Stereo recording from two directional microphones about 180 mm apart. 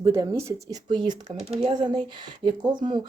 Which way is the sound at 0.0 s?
20° right (ahead or behind).